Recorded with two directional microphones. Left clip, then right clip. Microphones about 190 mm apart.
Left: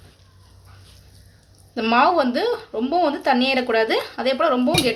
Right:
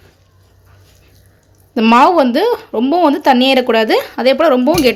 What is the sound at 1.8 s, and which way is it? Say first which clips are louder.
Speech: right 8 dB; 40° right (ahead or behind).